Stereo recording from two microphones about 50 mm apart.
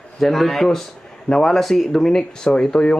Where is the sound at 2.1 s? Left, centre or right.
Centre.